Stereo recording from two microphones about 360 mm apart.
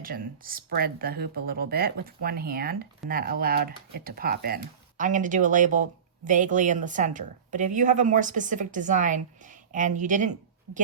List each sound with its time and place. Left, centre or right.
0.0 s speech: right